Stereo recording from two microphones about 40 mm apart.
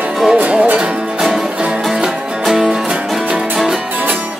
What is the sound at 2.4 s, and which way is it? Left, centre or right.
Music, centre.